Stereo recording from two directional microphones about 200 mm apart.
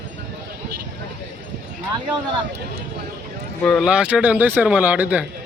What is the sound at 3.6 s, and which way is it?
Speech, centre (ahead or behind).